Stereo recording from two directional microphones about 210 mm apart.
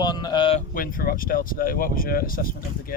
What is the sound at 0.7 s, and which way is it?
Speech, 40° left (ahead or behind).